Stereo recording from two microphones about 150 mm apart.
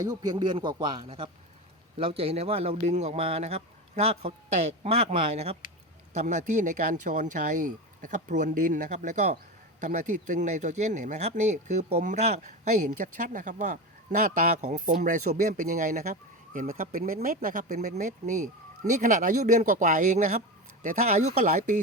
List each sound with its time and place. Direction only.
0.0 s a man's voice: 25° right (ahead or behind); by 12.5 s 50° right (ahead or behind)
13.0 s speech: 65° right (ahead or behind)
14.2 s a man's voice: 70° right (ahead or behind); by 21.8 s 55° right (ahead or behind)